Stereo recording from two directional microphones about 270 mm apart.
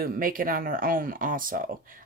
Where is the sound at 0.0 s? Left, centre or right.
Right.